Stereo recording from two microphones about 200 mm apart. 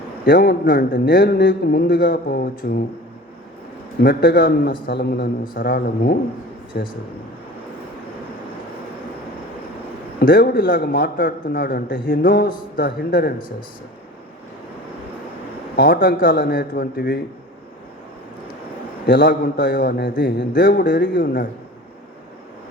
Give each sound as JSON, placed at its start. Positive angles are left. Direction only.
{"t": 0.3, "sound": "a man's voice", "side_deg": 45}
{"t": 4.0, "sound": "a man's voice", "side_deg": 50}
{"t": 10.2, "sound": "a man's voice", "side_deg": 45}
{"t": 15.7, "sound": "a man's voice", "side_deg": 45}
{"t": 19.0, "sound": "a man's voice", "side_deg": 45}
{"t": 20.5, "sound": "a man's voice", "side_deg": 45}